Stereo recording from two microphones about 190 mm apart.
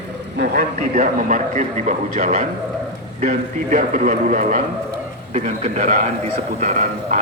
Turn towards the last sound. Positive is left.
turn(degrees=-45)  # may be behind; listen again after turning